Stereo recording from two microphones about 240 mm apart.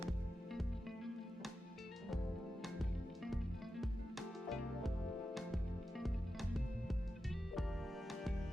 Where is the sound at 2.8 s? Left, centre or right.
Centre.